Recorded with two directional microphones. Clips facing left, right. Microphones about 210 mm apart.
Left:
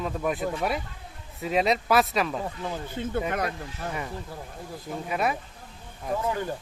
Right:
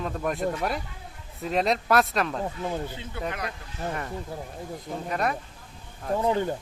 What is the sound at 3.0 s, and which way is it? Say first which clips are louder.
Speech: left 5 dB; 50° left (ahead or behind).